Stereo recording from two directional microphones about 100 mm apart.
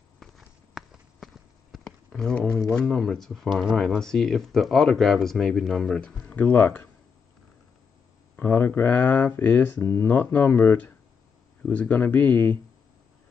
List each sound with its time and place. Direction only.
0.4 s clip-clop: centre (ahead or behind)
2.7 s speech: 10° left (ahead or behind)
8.4 s speech: 20° left (ahead or behind)